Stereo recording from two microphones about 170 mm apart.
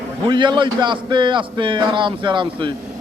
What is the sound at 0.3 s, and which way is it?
A man's voice, 25° right (ahead or behind).